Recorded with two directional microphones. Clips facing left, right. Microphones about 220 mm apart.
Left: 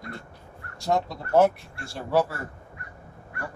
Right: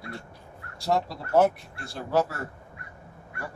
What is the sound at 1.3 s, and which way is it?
Speech, centre (ahead or behind).